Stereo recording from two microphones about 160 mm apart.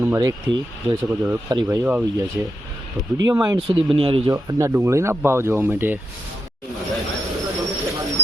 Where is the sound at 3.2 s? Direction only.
20° right (ahead or behind).